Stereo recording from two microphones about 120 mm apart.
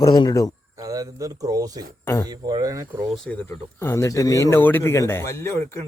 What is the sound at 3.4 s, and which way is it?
Speech, 20° left (ahead or behind).